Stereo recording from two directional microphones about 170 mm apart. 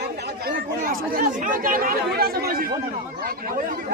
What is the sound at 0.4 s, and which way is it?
Speech, 55° right (ahead or behind).